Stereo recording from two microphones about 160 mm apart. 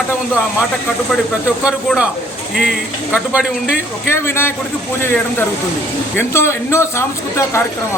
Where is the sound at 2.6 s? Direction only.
5° right (ahead or behind).